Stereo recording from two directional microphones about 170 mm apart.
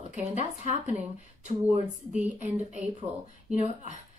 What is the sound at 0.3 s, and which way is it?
Speech, 45° left (ahead or behind).